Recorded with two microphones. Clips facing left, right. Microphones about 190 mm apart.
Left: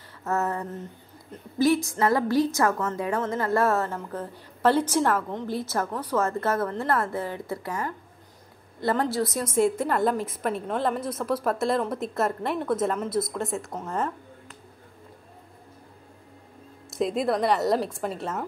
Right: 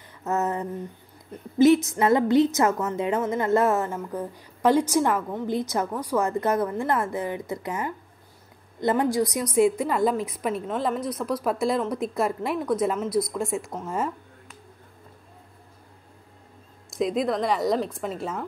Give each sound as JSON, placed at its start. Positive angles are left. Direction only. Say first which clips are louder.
{"t": 0.2, "sound": "a sound", "louder": "right 1 dB", "side_deg": -20}
{"t": 1.6, "sound": "a woman's voice", "louder": "right 4 dB", "side_deg": -20}
{"t": 9.6, "sound": "a woman's voice", "louder": "right 2 dB", "side_deg": 0}
{"t": 16.9, "sound": "a woman's voice", "louder": "even", "side_deg": 0}